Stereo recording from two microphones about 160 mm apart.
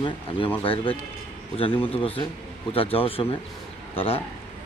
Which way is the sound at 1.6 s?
35° left (ahead or behind).